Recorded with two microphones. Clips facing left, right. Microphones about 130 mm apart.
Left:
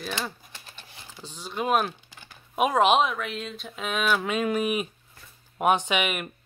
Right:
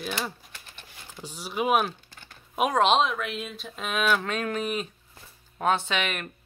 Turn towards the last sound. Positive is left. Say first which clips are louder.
# left 3 dB
turn(degrees=10)  # may be behind; listen again after turning